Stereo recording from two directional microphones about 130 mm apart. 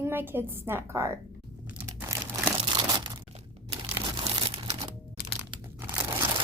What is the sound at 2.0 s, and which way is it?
Crumpling, 20° right (ahead or behind).